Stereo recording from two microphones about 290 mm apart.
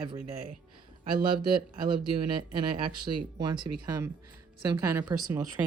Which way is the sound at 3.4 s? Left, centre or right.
Centre.